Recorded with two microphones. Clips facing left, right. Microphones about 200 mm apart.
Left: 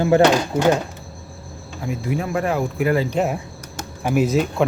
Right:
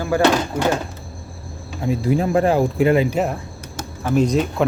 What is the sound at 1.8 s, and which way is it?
Speech, 30° right (ahead or behind).